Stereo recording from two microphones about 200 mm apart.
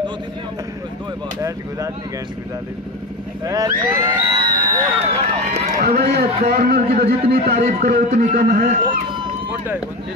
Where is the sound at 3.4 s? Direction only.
20° right (ahead or behind).